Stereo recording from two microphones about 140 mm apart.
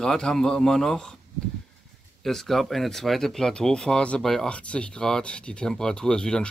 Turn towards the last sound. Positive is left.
turn(degrees=5)  # may be behind; listen again after turning